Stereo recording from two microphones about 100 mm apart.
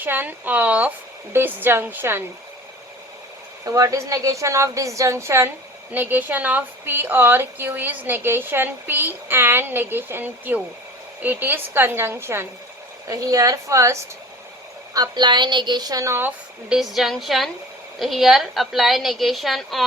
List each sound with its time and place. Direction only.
0.0 s a woman's voice: 20° right (ahead or behind)
3.6 s a woman's voice: 35° right (ahead or behind)
13.1 s a woman's voice: 35° right (ahead or behind)
14.9 s a woman's voice: 45° right (ahead or behind); by 16.3 s 25° right (ahead or behind)
16.6 s a woman's voice: 5° right (ahead or behind)